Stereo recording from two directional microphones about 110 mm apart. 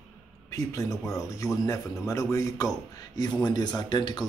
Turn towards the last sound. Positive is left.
turn(degrees=40)  # may be behind; listen again after turning